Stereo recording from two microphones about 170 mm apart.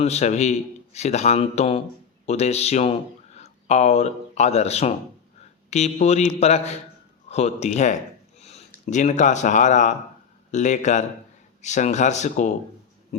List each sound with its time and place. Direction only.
0.0 s speech: 40° left (ahead or behind)